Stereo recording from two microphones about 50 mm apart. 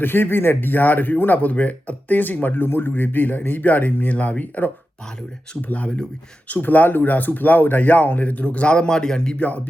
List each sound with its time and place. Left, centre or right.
0.0 s speech: left
2.6 s speech: left